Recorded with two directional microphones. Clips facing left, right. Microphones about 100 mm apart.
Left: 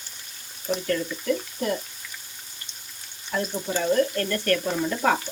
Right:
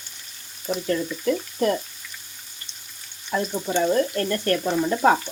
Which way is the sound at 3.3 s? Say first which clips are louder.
Right 3 dB; 25° right (ahead or behind).